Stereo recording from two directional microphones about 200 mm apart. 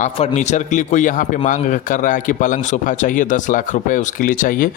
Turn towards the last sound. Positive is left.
turn(degrees=40)  # may be behind; listen again after turning